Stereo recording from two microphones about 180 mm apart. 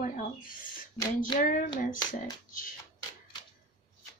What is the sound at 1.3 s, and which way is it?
A woman's voice, 50° left (ahead or behind).